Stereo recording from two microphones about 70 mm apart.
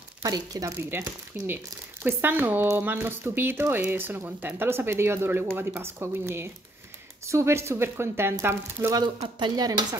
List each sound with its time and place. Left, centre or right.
0.2 s speech: right
0.7 s speech: right
8.9 s speech: right